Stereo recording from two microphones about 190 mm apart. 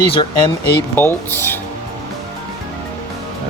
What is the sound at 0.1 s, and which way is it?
Speech, 25° left (ahead or behind).